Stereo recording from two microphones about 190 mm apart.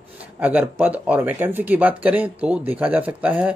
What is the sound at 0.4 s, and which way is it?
Speech, 10° right (ahead or behind).